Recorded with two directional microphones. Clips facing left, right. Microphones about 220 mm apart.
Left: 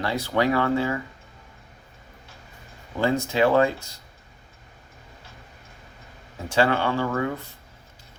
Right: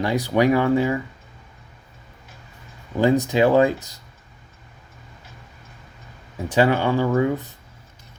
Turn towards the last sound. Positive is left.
turn(degrees=-15)  # may be behind; listen again after turning